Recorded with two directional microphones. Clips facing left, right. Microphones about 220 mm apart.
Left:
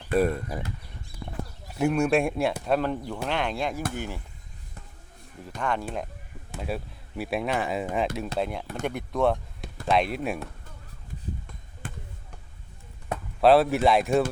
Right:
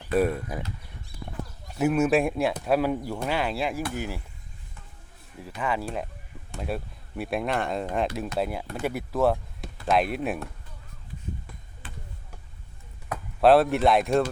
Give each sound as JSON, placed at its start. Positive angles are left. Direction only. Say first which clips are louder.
{"t": 0.1, "sound": "speech", "louder": "even", "side_deg": -5}
{"t": 1.6, "sound": "speech", "louder": "right 1 dB", "side_deg": -5}
{"t": 5.5, "sound": "speech", "louder": "even", "side_deg": -5}
{"t": 11.8, "sound": "basketball bounce", "louder": "left 6 dB", "side_deg": 50}
{"t": 13.4, "sound": "speech", "louder": "even", "side_deg": 0}